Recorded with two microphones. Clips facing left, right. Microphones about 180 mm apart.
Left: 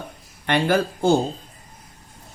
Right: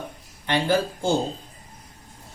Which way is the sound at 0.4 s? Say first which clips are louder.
Left 2 dB; 55° left (ahead or behind).